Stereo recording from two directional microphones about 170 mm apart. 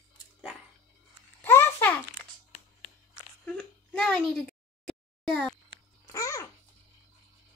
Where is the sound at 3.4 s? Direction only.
5° left (ahead or behind).